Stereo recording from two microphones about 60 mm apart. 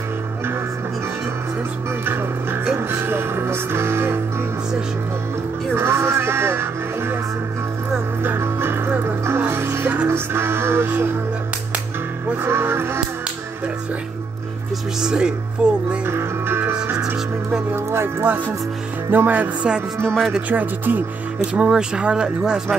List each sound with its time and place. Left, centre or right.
2.7 s music: right
5.8 s music: right
8.2 s music: right
12.4 s music: right
15.0 s speech: centre
16.1 s music: right
16.9 s music: centre
17.7 s music: right
20.4 s speech: right
21.5 s speech: centre